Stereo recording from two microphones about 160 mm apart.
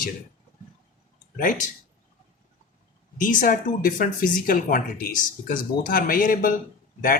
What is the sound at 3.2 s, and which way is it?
Speech, 55° left (ahead or behind).